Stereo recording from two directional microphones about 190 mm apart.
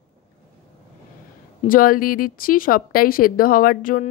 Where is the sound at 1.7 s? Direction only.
45° left (ahead or behind).